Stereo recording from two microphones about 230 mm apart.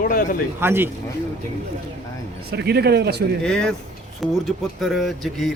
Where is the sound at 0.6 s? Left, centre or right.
Centre.